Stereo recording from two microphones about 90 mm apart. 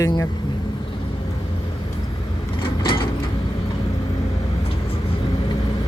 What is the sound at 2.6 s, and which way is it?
Mechanisms, 75° left (ahead or behind).